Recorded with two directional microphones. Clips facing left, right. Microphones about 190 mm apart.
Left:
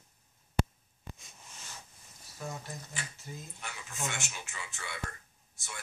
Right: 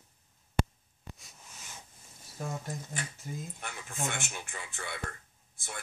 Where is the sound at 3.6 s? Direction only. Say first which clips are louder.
Right 1 dB; 55° right (ahead or behind).